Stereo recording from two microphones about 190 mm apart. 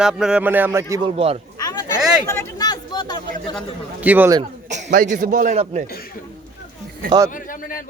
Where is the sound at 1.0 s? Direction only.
30° right (ahead or behind).